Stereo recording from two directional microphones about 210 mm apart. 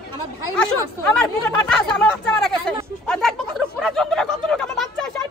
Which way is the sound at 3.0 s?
5° left (ahead or behind).